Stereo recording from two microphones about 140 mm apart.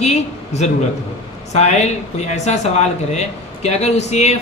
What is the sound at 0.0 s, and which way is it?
Speech, 50° left (ahead or behind).